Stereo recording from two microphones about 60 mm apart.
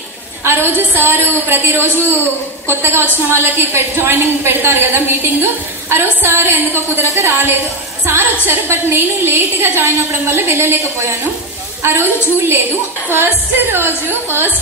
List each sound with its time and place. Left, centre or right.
0.4 s a woman's voice: right